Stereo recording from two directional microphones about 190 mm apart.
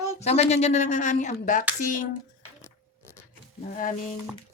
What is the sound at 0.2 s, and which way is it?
Speech, 35° left (ahead or behind).